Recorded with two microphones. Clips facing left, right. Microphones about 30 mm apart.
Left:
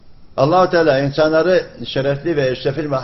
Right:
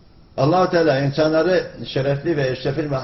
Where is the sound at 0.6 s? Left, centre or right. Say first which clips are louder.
Left 3 dB; centre.